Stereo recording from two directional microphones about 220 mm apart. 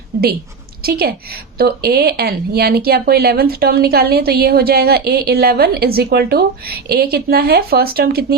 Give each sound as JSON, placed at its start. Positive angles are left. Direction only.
{"t": 0.1, "sound": "speech", "side_deg": -45}